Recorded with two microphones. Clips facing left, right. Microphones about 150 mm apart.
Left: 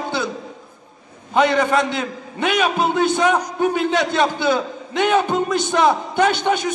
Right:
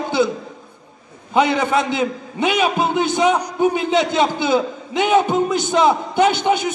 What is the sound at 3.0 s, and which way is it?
A man's voice, 20° right (ahead or behind).